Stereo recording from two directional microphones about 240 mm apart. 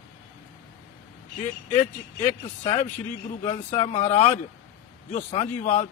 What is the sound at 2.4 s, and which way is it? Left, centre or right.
Speech, left.